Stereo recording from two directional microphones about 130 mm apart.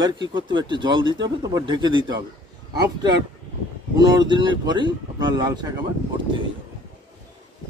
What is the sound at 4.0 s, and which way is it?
Speech, 30° right (ahead or behind).